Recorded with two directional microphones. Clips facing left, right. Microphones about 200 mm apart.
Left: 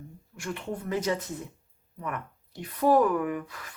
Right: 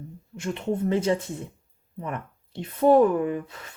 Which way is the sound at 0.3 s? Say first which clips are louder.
Right 7 dB; 20° right (ahead or behind).